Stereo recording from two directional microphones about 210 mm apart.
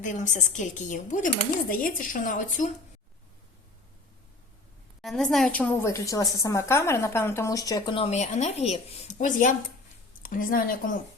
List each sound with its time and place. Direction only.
0.0 s speech: 35° left (ahead or behind)
5.0 s a woman's voice: centre (ahead or behind); by 10.9 s 40° left (ahead or behind)